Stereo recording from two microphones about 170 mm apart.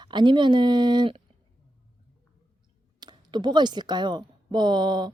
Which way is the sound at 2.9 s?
25° right (ahead or behind).